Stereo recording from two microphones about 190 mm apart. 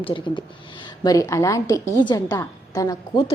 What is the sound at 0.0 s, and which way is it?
A woman's voice, 25° left (ahead or behind).